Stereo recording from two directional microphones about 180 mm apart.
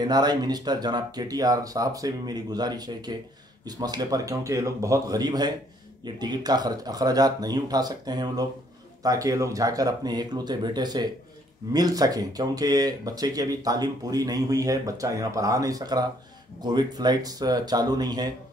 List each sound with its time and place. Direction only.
0.0 s speech: 20° right (ahead or behind)